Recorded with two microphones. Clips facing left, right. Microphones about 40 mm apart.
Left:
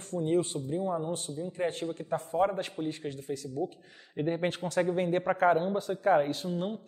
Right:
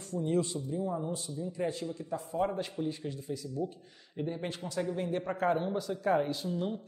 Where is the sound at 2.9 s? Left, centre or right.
Left.